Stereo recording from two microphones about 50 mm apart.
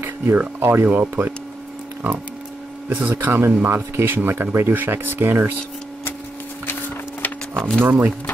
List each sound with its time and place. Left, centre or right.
0.0 s speech: right
2.9 s speech: right
6.6 s a sound: left
7.8 s speech: right